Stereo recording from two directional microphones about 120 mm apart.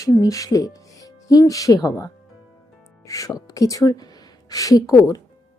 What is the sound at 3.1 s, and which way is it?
Speech, 30° left (ahead or behind).